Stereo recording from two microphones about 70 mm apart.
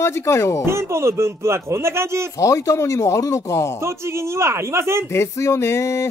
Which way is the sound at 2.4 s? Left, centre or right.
Left.